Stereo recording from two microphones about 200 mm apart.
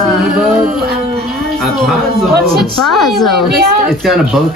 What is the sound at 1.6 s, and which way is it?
Speech, centre (ahead or behind).